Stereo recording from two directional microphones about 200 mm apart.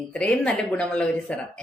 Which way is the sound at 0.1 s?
5° left (ahead or behind).